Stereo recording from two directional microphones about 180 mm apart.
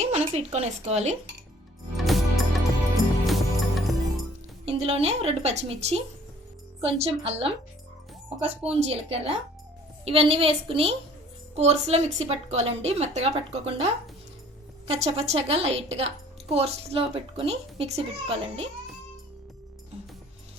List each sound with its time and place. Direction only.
0.0 s speech: 35° right (ahead or behind)
2.0 s music: centre (ahead or behind)
4.6 s a woman's voice: 35° right (ahead or behind)